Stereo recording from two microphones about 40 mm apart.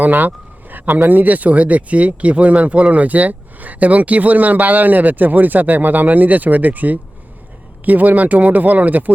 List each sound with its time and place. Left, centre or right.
0.0 s speech: right